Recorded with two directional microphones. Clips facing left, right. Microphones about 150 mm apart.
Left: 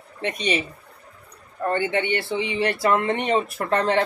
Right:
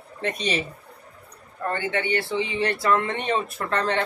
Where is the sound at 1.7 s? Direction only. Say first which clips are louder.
Left 3 dB; 25° left (ahead or behind).